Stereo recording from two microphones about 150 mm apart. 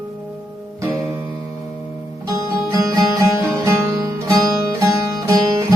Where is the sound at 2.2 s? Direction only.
20° right (ahead or behind).